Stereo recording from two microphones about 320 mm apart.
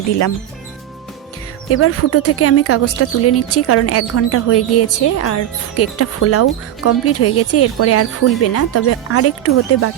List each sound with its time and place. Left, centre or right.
1.7 s speech: left